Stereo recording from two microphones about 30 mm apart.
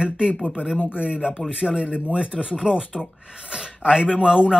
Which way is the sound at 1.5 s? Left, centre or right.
Right.